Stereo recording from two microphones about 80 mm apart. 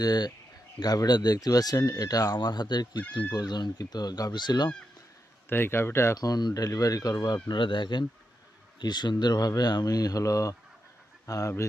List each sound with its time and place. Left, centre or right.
0.0 s speech: left
5.5 s speech: left
6.1 s speech: left
8.8 s speech: left